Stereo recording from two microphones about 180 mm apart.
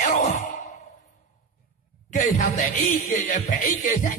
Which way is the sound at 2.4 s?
45° left (ahead or behind).